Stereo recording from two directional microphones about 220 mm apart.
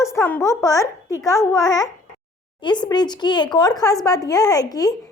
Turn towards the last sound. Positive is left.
turn(degrees=15)  # may be behind; listen again after turning